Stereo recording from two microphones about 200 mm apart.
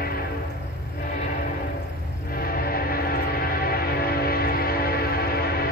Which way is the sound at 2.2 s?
45° left (ahead or behind).